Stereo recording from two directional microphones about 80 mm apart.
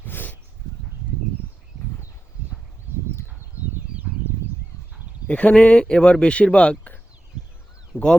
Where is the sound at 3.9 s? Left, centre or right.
Centre.